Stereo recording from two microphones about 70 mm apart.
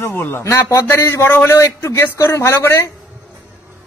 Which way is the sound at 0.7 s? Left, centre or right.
Left.